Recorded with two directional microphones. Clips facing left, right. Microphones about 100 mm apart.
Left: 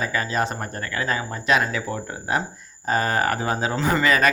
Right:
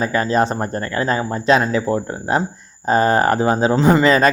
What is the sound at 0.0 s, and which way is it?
A man's voice, 35° right (ahead or behind).